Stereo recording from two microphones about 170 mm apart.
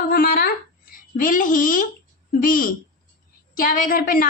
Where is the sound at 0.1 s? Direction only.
60° left (ahead or behind).